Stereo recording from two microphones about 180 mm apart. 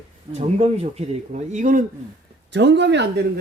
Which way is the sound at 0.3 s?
35° right (ahead or behind).